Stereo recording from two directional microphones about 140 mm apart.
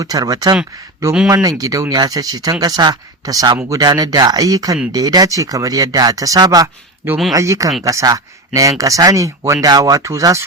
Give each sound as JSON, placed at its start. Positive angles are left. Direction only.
{"t": 0.0, "sound": "speech", "side_deg": -25}